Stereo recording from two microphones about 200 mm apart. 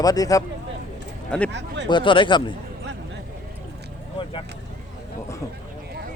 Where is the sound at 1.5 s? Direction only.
60° right (ahead or behind).